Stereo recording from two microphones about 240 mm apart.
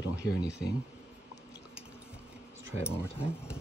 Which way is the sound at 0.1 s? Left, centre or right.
Left.